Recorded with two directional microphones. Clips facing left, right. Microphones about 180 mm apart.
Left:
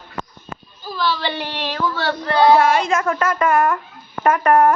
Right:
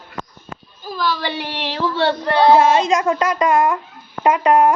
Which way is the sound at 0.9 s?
15° right (ahead or behind).